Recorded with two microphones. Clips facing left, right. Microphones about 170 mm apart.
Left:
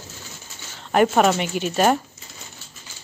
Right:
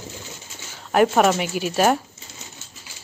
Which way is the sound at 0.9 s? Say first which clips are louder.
Even; centre (ahead or behind).